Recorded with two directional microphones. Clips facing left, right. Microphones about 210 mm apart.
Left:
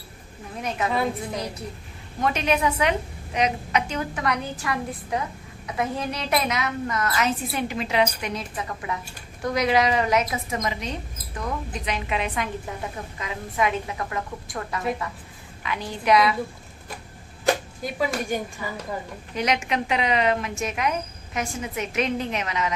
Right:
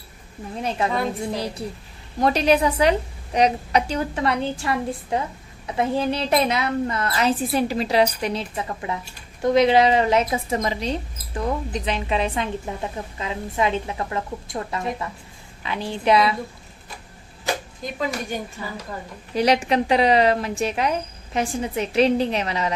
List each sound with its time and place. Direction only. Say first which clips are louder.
0.6 s a woman's voice: right 1 dB; 30° right (ahead or behind)
17.8 s speech: left 1 dB; 10° left (ahead or behind)
19.3 s a woman's voice: right 6 dB; 35° right (ahead or behind)